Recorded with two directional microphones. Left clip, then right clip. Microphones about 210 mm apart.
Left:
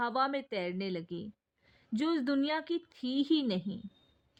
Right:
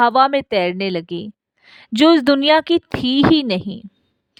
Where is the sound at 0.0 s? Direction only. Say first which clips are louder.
Right 18 dB; 50° right (ahead or behind).